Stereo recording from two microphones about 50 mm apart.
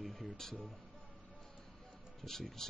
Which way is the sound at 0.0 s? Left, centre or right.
Centre.